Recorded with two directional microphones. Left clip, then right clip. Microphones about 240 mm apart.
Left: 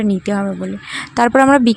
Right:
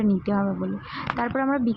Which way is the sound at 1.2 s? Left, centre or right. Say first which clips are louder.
Left 15 dB; left.